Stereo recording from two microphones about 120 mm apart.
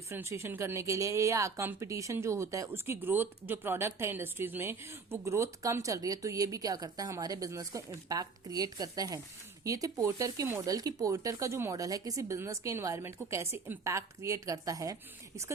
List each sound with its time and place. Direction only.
0.1 s speech: 20° right (ahead or behind)